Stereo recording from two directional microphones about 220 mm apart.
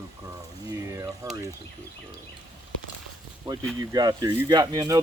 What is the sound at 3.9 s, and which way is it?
Speech, 15° right (ahead or behind).